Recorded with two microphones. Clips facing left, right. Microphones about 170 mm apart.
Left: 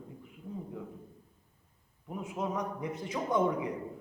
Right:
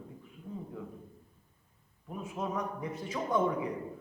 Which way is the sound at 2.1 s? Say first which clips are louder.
Left 1 dB; 15° left (ahead or behind).